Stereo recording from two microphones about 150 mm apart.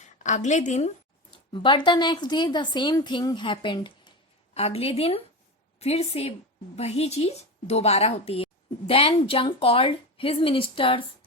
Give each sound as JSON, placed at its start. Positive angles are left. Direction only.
{"t": 0.0, "sound": "a woman's voice", "side_deg": 55}
{"t": 1.5, "sound": "a woman's voice", "side_deg": 35}
{"t": 4.5, "sound": "a woman's voice", "side_deg": 45}